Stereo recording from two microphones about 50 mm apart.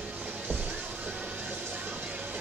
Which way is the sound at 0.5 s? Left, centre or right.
Right.